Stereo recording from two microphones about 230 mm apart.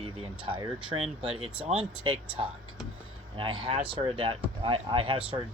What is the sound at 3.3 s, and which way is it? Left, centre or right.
Speech, right.